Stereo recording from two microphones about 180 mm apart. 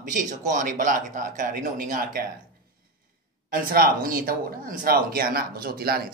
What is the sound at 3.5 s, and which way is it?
A man's voice, 55° right (ahead or behind).